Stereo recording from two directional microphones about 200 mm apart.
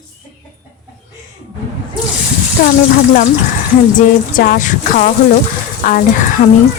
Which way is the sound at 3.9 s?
45° left (ahead or behind).